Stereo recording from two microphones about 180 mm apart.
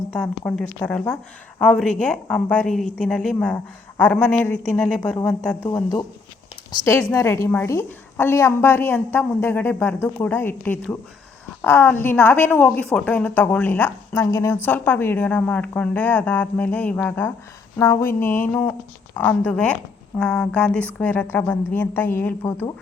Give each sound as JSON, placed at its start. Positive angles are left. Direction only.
{"t": 0.1, "sound": "a woman's voice", "side_deg": 5}
{"t": 5.7, "sound": "a woman's voice", "side_deg": 20}